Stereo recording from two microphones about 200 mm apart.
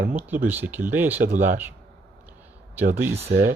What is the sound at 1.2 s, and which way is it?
Speech, 40° right (ahead or behind).